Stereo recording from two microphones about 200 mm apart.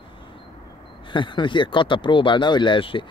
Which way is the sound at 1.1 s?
25° left (ahead or behind).